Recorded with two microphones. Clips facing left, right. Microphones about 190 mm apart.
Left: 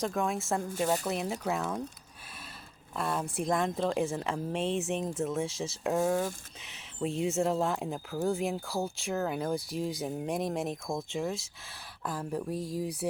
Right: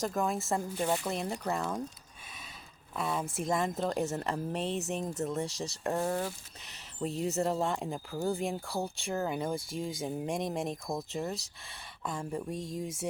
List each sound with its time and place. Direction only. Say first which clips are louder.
0.0 s speech: left 1 dB; centre (ahead or behind)
2.9 s speech: left 1 dB; centre (ahead or behind)